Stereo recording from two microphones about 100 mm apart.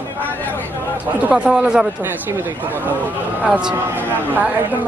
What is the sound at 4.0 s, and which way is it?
Speech, 20° right (ahead or behind).